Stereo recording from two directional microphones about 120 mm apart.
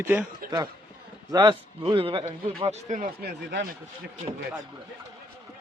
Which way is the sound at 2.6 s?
75° right (ahead or behind).